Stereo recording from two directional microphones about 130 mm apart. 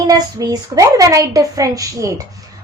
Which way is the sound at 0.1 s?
30° right (ahead or behind).